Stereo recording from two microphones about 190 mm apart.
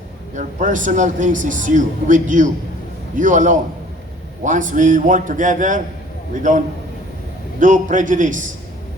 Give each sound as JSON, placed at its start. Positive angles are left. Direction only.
{"t": 0.3, "sound": "speech", "side_deg": -40}
{"t": 7.6, "sound": "speech", "side_deg": -45}